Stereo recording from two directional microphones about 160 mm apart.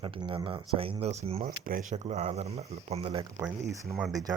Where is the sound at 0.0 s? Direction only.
35° right (ahead or behind).